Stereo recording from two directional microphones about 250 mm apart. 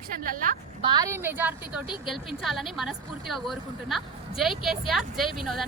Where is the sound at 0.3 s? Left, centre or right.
Right.